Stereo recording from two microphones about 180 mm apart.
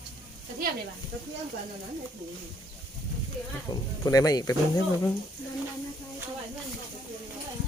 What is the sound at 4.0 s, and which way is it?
Speech, 20° left (ahead or behind).